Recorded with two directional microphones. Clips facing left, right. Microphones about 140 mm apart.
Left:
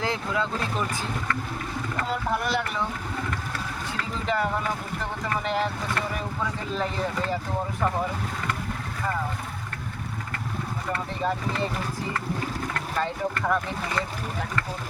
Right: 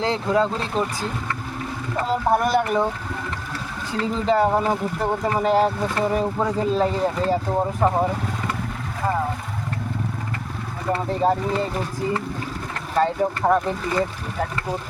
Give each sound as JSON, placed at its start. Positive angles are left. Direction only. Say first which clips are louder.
{"t": 0.0, "sound": "speech", "louder": "right 7 dB", "side_deg": -35}
{"t": 2.0, "sound": "speech", "louder": "right 9 dB", "side_deg": -45}
{"t": 4.3, "sound": "speech", "louder": "right 8 dB", "side_deg": -35}
{"t": 10.9, "sound": "speech", "louder": "right 8 dB", "side_deg": -35}
{"t": 13.0, "sound": "speech", "louder": "right 8 dB", "side_deg": -35}